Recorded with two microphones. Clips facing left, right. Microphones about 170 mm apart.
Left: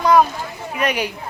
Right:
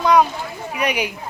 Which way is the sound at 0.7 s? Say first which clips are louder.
Left 1 dB; 15° right (ahead or behind).